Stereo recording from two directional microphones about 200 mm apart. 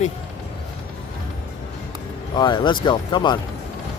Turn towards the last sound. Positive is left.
turn(degrees=25)  # may be behind; listen again after turning